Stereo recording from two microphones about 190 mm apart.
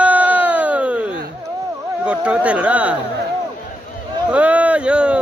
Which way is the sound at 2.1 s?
5° right (ahead or behind).